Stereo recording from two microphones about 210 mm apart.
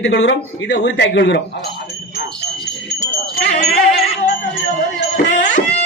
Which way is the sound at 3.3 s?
30° left (ahead or behind).